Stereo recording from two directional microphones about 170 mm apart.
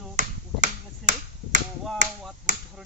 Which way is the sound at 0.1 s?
45° right (ahead or behind).